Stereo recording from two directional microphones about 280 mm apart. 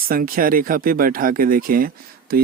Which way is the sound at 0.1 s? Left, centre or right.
Right.